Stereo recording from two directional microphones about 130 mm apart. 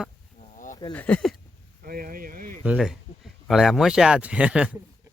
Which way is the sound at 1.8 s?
90° right.